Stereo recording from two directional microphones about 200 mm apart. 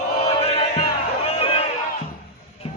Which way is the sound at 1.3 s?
30° left (ahead or behind).